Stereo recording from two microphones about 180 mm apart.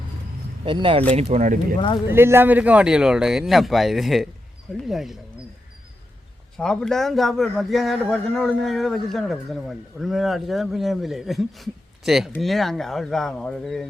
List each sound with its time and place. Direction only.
0.6 s speech: 30° right (ahead or behind)
2.0 s a man's voice: 15° right (ahead or behind)
6.6 s a man's voice: 5° left (ahead or behind)